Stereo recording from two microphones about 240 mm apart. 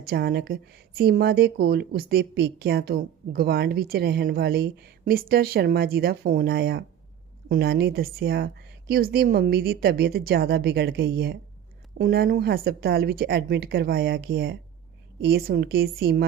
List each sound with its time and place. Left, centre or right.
0.0 s speech: right